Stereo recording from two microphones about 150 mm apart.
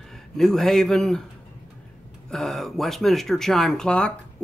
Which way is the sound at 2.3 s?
Centre (ahead or behind).